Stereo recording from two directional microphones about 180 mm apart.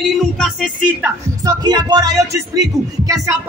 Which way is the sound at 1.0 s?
20° right (ahead or behind).